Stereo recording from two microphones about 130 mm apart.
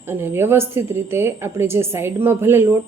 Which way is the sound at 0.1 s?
15° right (ahead or behind).